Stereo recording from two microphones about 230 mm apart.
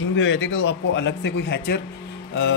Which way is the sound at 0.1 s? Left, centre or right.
Left.